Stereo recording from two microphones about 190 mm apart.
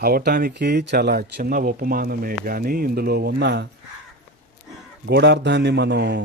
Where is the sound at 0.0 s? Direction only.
55° right (ahead or behind).